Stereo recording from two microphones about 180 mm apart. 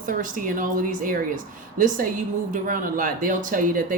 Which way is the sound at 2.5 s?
50° right (ahead or behind).